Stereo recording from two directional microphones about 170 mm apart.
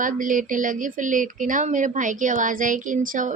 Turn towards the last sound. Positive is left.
turn(degrees=-50)  # may be behind; listen again after turning